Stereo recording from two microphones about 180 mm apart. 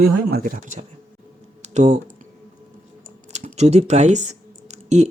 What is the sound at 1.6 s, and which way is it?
Computer keyboard, 40° right (ahead or behind).